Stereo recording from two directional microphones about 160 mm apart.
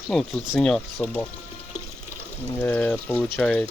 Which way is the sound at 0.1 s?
Centre (ahead or behind).